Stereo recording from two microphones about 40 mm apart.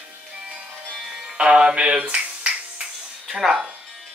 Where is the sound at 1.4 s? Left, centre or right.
Right.